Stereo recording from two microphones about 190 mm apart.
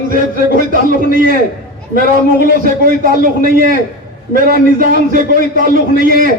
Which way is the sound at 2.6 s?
50° right (ahead or behind).